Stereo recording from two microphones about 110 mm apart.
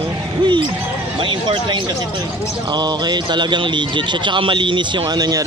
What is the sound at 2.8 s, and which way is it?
A man's voice, 40° right (ahead or behind).